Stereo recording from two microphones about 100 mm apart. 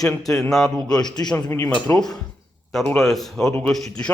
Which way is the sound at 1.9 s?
5° left (ahead or behind).